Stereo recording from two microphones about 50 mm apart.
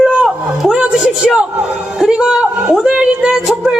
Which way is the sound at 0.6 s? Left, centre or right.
Centre.